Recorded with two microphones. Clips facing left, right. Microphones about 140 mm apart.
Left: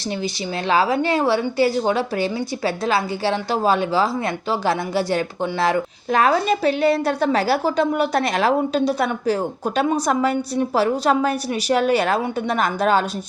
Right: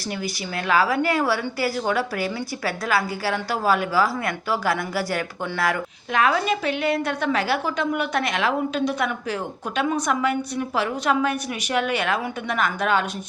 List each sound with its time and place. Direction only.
0.7 s a woman's voice: 25° left (ahead or behind)